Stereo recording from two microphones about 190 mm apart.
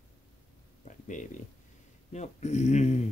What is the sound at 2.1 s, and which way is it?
Speech, 35° left (ahead or behind).